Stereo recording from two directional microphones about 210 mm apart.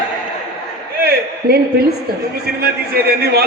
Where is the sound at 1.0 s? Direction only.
50° right (ahead or behind).